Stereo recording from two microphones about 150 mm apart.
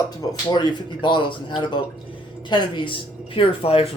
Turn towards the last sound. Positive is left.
turn(degrees=40)  # may be behind; listen again after turning